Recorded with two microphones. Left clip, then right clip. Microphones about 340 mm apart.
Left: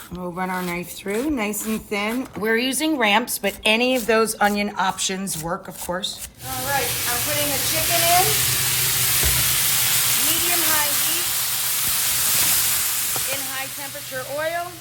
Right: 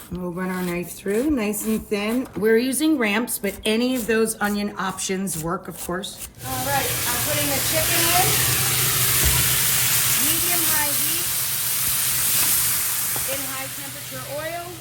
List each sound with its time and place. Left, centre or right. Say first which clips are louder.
0.3 s a woman's voice: left 3 dB; centre
6.5 s sizzle: even; centre
11.0 s a sound: left 2 dB; centre